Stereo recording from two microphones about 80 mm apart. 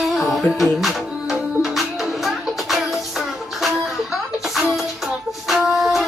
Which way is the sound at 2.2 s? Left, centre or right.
Centre.